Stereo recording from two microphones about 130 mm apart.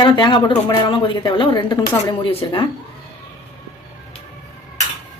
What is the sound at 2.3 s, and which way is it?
Speech, 45° left (ahead or behind).